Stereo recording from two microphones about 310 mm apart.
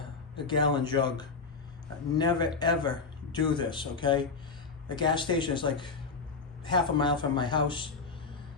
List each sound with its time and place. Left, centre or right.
0.4 s speech: centre